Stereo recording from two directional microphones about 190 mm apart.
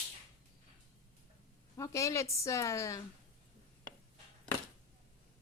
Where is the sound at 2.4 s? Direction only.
15° left (ahead or behind).